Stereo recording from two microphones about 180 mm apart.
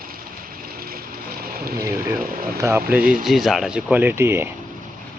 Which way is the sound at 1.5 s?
55° right (ahead or behind).